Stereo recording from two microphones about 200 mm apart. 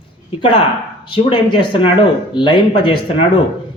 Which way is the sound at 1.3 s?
25° left (ahead or behind).